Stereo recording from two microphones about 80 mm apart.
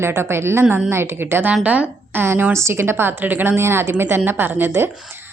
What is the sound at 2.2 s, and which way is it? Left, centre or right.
Speech, right.